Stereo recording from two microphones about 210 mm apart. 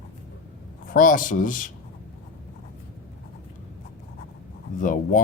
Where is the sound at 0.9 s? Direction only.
40° left (ahead or behind).